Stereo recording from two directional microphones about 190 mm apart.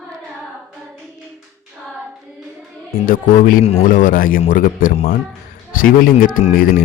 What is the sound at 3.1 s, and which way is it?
Speech, 45° left (ahead or behind).